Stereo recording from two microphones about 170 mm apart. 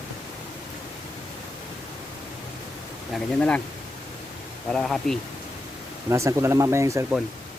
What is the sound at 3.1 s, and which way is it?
Speech, 5° left (ahead or behind).